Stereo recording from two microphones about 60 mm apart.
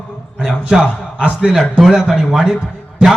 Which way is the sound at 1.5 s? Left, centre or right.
Centre.